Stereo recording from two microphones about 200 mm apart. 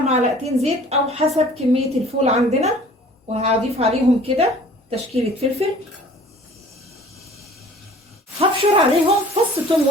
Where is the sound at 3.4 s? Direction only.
30° right (ahead or behind).